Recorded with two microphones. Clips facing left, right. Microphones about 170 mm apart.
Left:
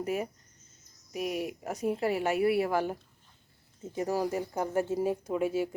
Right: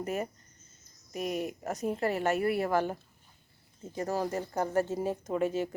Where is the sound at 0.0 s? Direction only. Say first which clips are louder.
Left 1 dB; 10° left (ahead or behind).